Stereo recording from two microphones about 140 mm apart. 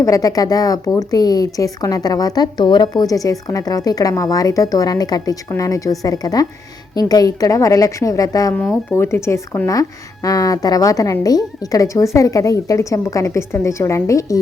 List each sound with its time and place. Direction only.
0.0 s a woman's voice: 25° left (ahead or behind)